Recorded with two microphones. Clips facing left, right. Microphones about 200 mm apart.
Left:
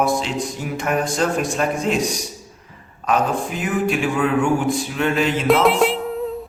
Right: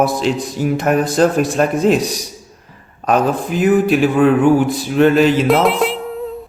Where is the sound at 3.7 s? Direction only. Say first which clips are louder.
Right 8 dB; 35° right (ahead or behind).